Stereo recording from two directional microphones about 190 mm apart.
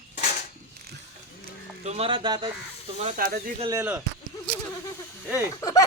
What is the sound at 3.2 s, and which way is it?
Speech, 50° right (ahead or behind).